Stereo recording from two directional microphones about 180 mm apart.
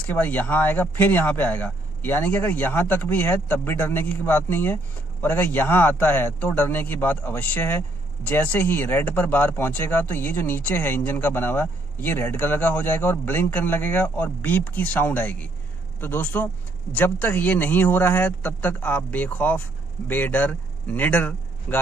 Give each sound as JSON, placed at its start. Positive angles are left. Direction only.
{"t": 0.0, "sound": "a man's voice", "side_deg": 10}